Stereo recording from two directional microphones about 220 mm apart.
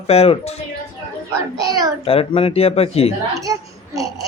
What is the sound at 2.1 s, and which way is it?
Speech, 25° left (ahead or behind).